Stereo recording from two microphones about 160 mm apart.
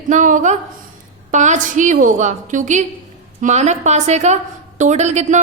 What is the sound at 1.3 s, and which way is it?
A woman's voice, 50° right (ahead or behind).